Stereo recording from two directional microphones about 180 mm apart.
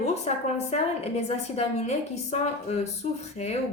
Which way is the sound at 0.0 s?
35° left (ahead or behind).